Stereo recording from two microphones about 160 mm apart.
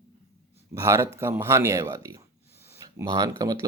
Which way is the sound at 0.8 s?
20° right (ahead or behind).